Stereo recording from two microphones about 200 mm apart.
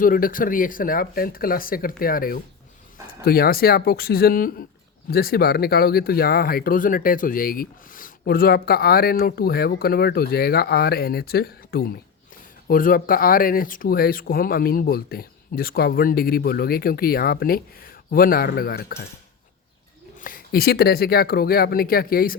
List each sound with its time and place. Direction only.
0.0 s speech: 45° left (ahead or behind)
20.2 s speech: 45° left (ahead or behind)